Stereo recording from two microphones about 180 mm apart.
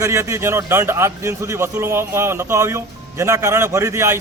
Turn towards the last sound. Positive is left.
turn(degrees=-15)  # may be behind; listen again after turning